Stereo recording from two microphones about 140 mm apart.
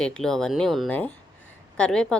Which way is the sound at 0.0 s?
5° left (ahead or behind).